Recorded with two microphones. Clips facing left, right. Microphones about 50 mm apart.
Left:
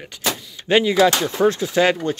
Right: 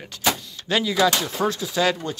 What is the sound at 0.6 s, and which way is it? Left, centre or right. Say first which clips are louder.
Speech: left 7 dB; left.